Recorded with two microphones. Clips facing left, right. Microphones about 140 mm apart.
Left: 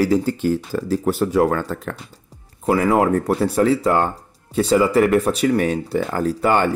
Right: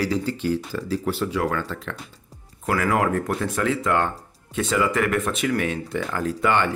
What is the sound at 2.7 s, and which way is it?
Speech, 25° left (ahead or behind).